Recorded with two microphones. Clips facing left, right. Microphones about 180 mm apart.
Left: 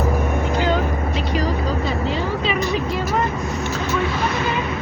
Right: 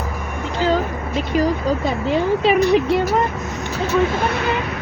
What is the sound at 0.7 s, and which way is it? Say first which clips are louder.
Vehicle: right 1 dB; 45° right (ahead or behind).